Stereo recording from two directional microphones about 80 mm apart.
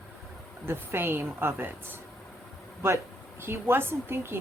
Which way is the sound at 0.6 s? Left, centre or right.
Right.